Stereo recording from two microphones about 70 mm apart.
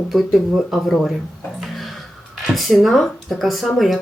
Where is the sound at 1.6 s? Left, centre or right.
Centre.